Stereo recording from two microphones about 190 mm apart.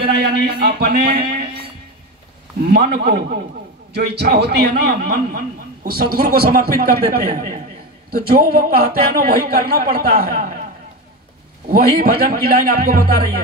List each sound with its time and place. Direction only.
0.0 s speech: 60° right (ahead or behind)
2.7 s a man's voice: 60° right (ahead or behind)
11.7 s a man's voice: 50° right (ahead or behind)